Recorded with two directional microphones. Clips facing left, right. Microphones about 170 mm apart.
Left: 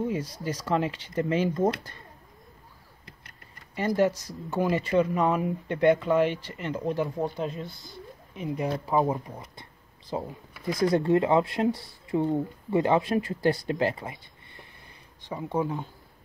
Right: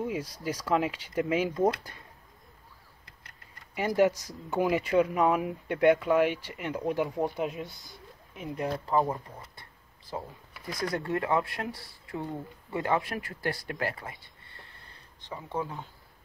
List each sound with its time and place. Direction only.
0.0 s speech: 5° right (ahead or behind)
3.7 s speech: 10° right (ahead or behind)
8.4 s speech: centre (ahead or behind)
8.9 s speech: 15° left (ahead or behind)